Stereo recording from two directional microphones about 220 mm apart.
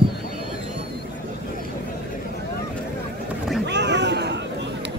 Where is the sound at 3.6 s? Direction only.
50° right (ahead or behind).